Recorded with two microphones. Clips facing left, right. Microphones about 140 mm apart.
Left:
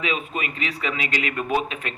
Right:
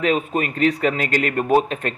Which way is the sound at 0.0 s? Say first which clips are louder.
Right 7 dB; 45° right (ahead or behind).